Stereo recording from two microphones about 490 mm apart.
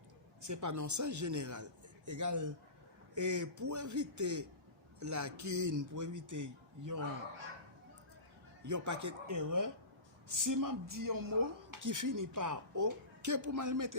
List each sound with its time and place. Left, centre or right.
0.4 s speech: right
8.6 s speech: right